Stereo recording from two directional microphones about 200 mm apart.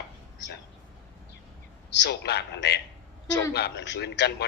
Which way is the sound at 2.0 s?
55° left (ahead or behind).